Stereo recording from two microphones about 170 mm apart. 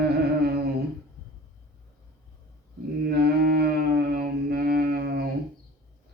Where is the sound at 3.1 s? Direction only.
65° right (ahead or behind).